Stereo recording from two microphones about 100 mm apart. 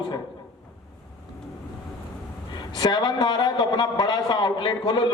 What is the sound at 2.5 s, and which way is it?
A man's voice, 45° left (ahead or behind).